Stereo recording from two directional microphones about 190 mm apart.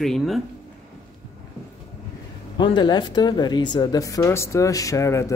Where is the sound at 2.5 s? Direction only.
25° left (ahead or behind).